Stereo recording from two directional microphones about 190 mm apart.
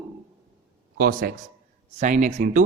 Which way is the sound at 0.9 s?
50° right (ahead or behind).